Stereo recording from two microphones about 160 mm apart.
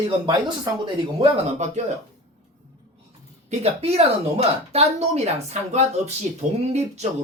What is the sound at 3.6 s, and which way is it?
Speech, 40° right (ahead or behind).